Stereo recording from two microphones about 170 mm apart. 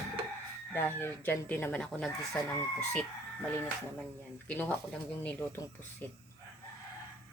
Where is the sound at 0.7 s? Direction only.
15° left (ahead or behind).